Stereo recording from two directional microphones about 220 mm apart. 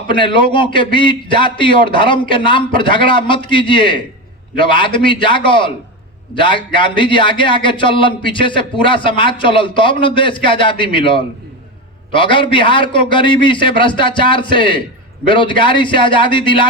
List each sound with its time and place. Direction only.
0.1 s a man's voice: 20° left (ahead or behind)